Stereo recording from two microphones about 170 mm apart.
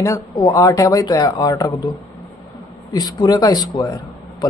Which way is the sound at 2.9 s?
25° left (ahead or behind).